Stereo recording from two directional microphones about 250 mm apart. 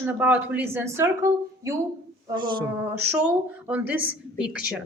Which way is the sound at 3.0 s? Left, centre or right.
Centre.